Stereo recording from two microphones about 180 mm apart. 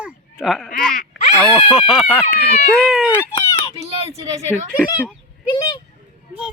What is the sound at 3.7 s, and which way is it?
Speech, 35° right (ahead or behind).